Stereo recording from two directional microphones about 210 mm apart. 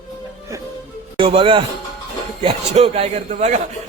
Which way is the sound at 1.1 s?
25° right (ahead or behind).